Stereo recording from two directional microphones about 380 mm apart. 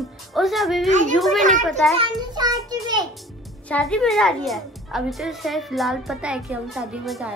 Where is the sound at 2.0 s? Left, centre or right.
Centre.